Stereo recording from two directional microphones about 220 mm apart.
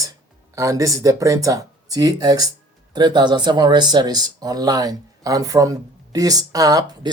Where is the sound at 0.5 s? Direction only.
15° right (ahead or behind).